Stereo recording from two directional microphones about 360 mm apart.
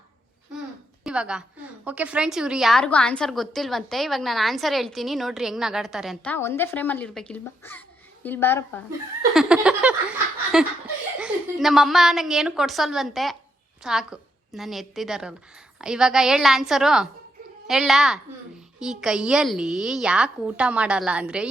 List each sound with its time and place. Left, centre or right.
1.0 s a woman's voice: centre
9.3 s a sound: centre
11.2 s a woman's voice: centre